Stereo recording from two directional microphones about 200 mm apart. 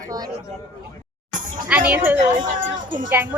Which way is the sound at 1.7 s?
5° right (ahead or behind).